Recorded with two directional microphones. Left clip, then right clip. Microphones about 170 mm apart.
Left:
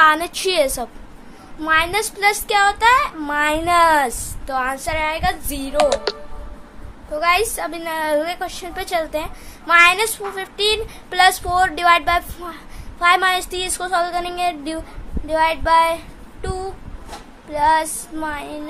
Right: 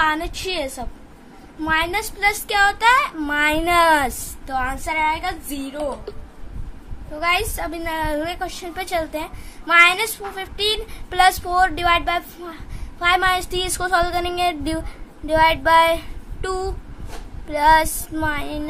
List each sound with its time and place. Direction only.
0.0 s a woman's voice: 10° left (ahead or behind)
1.6 s a woman's voice: 5° right (ahead or behind)
7.2 s a woman's voice: 5° right (ahead or behind); by 14.8 s 25° right (ahead or behind)
15.2 s child singing: 25° right (ahead or behind)